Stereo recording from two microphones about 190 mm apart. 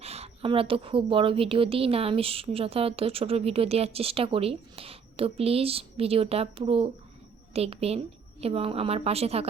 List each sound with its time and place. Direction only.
0.0 s a woman's voice: 35° right (ahead or behind)